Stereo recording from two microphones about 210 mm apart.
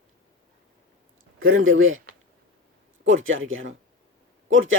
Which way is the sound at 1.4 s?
70° right (ahead or behind).